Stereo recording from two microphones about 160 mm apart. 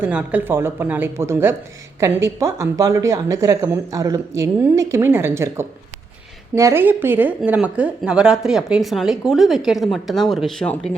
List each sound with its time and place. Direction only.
0.0 s a woman's voice: 10° right (ahead or behind)